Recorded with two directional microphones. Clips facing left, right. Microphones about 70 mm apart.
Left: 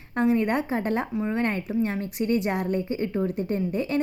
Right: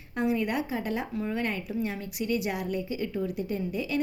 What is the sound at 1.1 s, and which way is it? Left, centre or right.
Speech, left.